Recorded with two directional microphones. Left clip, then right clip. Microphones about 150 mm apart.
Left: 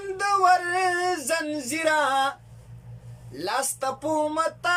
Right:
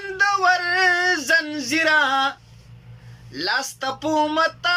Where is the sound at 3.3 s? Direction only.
25° left (ahead or behind).